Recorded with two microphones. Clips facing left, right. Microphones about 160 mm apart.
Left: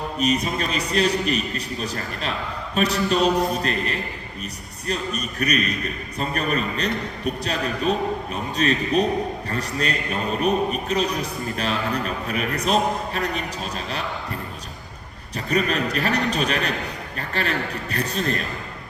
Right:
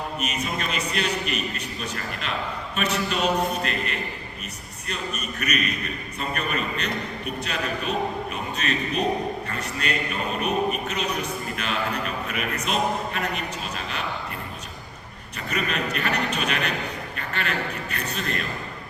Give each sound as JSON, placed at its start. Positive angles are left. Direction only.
{"t": 0.2, "sound": "a man's voice", "side_deg": 35}
{"t": 15.4, "sound": "a man's voice", "side_deg": 35}
{"t": 17.2, "sound": "a sound", "side_deg": 35}
{"t": 17.9, "sound": "a man's voice", "side_deg": 35}